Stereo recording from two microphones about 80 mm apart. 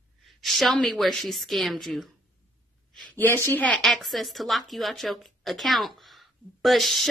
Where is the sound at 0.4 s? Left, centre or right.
Centre.